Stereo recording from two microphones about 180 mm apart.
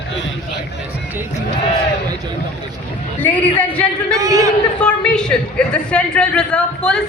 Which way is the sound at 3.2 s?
5° left (ahead or behind).